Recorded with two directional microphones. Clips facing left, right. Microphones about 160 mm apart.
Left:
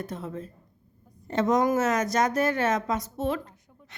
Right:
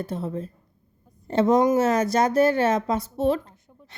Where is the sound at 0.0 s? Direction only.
30° right (ahead or behind).